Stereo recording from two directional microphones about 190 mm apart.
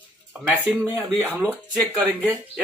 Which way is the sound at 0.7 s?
10° right (ahead or behind).